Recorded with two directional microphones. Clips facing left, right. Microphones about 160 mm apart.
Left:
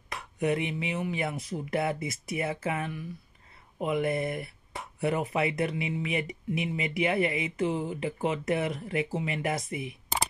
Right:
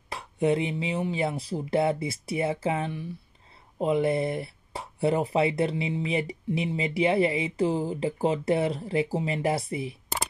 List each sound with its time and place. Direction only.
0.1 s speech: 25° right (ahead or behind)